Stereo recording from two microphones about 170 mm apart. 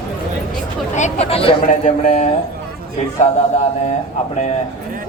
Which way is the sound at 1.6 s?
50° left (ahead or behind).